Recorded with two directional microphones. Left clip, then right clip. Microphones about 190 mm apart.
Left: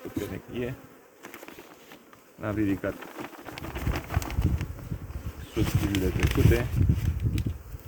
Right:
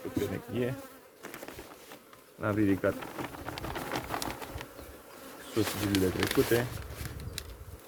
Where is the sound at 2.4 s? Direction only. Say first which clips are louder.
Right 1 dB; 15° right (ahead or behind).